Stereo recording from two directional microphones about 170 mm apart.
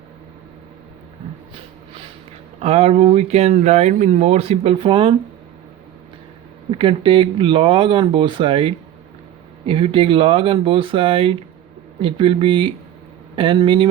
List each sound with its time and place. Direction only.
2.6 s speech: 40° right (ahead or behind)
6.7 s speech: 30° right (ahead or behind)